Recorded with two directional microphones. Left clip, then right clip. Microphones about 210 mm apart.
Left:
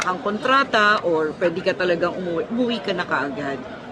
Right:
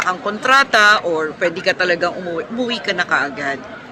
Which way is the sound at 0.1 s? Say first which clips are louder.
Right 5 dB; 15° left (ahead or behind).